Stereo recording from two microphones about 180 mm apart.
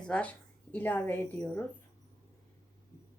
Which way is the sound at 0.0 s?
5° left (ahead or behind).